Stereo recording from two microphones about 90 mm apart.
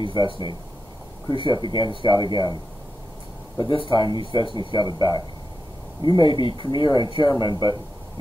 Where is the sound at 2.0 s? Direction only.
55° left (ahead or behind).